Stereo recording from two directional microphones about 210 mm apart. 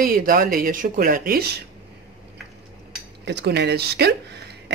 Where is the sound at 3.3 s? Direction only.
55° right (ahead or behind).